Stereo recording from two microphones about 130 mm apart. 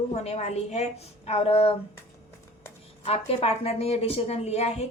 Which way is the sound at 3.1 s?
50° left (ahead or behind).